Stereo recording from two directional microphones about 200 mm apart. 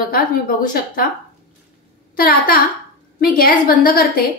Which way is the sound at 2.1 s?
50° left (ahead or behind).